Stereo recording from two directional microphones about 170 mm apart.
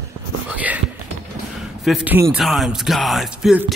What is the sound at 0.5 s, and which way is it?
Whispering, 10° right (ahead or behind).